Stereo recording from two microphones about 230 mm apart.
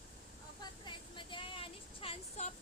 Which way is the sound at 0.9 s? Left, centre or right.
Left.